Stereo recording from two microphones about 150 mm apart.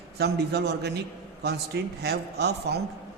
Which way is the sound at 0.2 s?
90° right.